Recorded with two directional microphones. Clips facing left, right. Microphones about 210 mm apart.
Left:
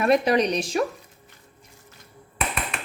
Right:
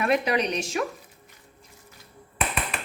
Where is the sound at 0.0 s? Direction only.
40° left (ahead or behind).